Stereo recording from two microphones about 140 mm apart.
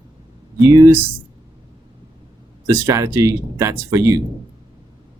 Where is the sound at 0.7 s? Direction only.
20° right (ahead or behind).